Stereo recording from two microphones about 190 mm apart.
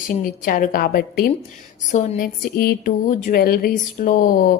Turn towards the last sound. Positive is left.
turn(degrees=45)  # may be behind; listen again after turning